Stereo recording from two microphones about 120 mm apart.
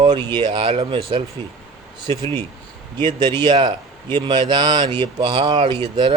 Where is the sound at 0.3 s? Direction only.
40° right (ahead or behind).